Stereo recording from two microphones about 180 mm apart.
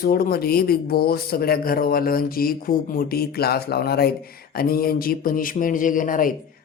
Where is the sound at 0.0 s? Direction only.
55° left (ahead or behind).